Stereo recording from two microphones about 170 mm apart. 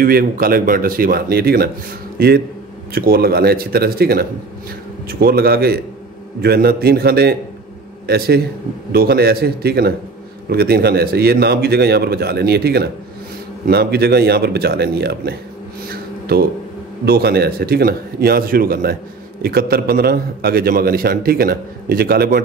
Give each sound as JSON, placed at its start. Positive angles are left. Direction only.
{"t": 0.0, "sound": "a man's voice", "side_deg": -60}
{"t": 15.9, "sound": "a sound", "side_deg": -65}
{"t": 17.0, "sound": "a man's voice", "side_deg": -70}